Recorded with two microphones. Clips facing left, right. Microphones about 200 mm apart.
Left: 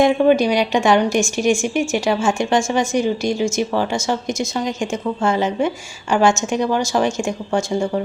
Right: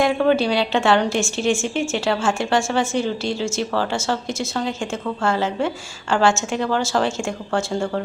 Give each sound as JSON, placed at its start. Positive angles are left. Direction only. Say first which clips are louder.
{"t": 0.0, "sound": "speech", "louder": "left 4 dB", "side_deg": 15}